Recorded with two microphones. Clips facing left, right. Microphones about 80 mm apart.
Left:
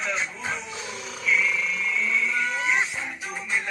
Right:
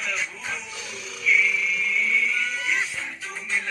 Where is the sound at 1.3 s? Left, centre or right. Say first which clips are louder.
Right 1 dB; left.